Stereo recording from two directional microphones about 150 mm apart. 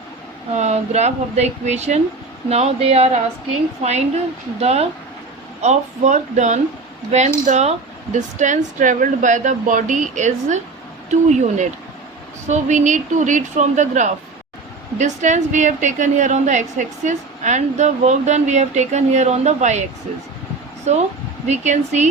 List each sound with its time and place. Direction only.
0.5 s a woman's voice: 50° right (ahead or behind)
4.6 s a woman's voice: 45° right (ahead or behind)
20.9 s a woman's voice: 50° right (ahead or behind)